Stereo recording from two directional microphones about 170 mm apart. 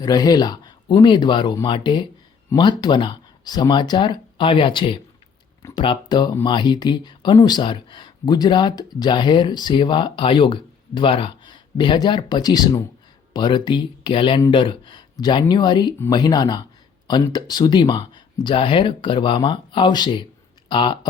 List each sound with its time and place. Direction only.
0.0 s a man's voice: 20° left (ahead or behind)